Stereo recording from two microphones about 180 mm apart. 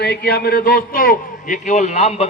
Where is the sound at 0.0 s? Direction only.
60° left (ahead or behind).